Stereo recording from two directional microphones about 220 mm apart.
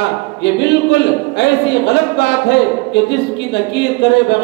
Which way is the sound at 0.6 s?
50° left (ahead or behind).